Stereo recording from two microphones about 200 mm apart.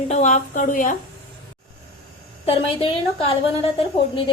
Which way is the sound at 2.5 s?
30° left (ahead or behind).